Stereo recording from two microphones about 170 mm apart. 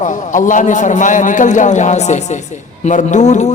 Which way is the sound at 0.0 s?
50° left (ahead or behind).